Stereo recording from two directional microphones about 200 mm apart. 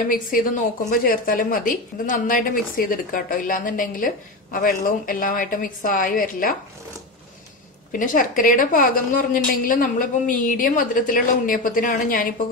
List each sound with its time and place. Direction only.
0.1 s a woman's voice: 45° left (ahead or behind)
7.9 s a woman's voice: 40° left (ahead or behind)